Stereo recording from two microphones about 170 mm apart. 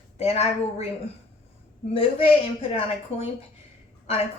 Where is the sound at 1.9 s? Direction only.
35° left (ahead or behind).